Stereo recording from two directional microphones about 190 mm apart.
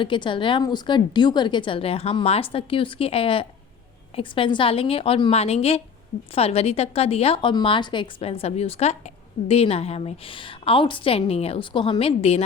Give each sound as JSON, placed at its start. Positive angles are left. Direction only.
{"t": 0.0, "sound": "a woman's voice", "side_deg": 25}